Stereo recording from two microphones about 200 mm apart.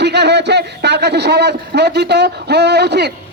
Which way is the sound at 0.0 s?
55° right (ahead or behind).